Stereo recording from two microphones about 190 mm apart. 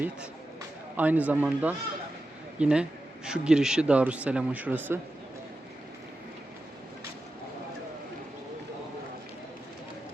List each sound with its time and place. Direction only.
0.9 s speech: 10° right (ahead or behind)